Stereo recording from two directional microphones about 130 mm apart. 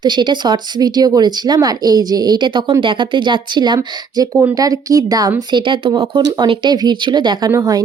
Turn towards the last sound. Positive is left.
turn(degrees=-30)  # may be behind; listen again after turning